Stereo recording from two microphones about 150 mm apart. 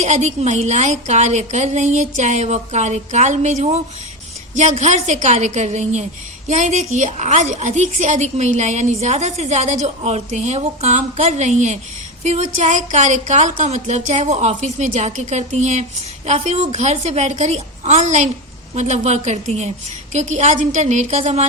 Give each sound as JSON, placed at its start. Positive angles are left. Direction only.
{"t": 0.0, "sound": "a woman's voice", "side_deg": -50}